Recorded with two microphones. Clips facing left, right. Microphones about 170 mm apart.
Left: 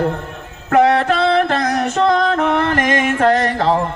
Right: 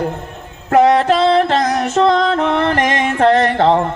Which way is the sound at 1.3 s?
25° right (ahead or behind).